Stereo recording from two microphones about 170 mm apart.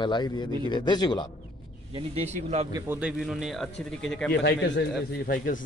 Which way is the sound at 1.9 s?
40° right (ahead or behind).